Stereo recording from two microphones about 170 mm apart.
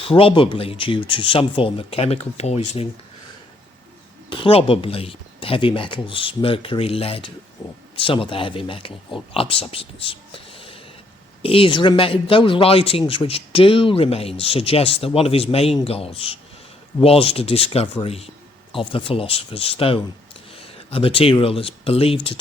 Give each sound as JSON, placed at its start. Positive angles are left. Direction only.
{"t": 0.0, "sound": "speech", "side_deg": 35}
{"t": 4.3, "sound": "speech", "side_deg": 30}